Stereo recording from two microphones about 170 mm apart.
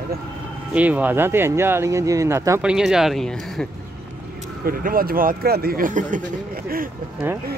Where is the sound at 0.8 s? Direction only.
10° right (ahead or behind).